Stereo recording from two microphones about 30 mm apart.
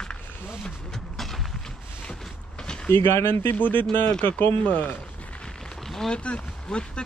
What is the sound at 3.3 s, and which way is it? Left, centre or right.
Speech, left.